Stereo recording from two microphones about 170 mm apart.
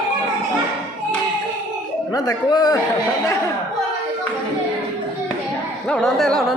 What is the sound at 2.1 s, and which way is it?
Speech, 20° left (ahead or behind).